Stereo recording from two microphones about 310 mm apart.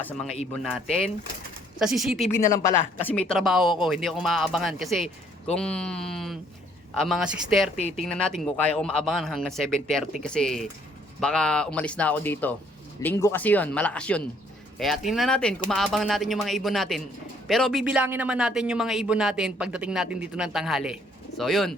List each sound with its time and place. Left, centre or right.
0.0 s speech: centre
7.8 s speech: left
8.0 s speech: centre